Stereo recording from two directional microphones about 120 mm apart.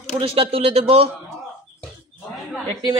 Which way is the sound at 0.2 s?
50° right (ahead or behind).